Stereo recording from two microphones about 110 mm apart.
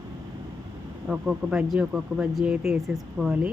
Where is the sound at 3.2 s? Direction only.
25° right (ahead or behind).